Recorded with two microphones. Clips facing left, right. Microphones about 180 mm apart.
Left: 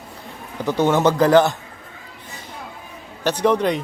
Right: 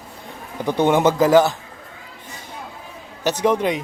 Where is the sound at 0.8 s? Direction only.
15° right (ahead or behind).